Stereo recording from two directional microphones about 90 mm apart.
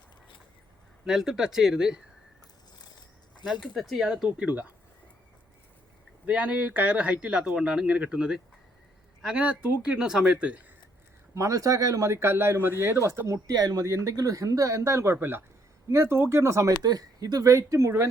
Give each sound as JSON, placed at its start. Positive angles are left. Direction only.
{"t": 1.0, "sound": "speech", "side_deg": -5}
{"t": 2.8, "sound": "a sound", "side_deg": 55}
{"t": 3.4, "sound": "speech", "side_deg": 0}
{"t": 6.2, "sound": "speech", "side_deg": -15}
{"t": 11.3, "sound": "speech", "side_deg": -40}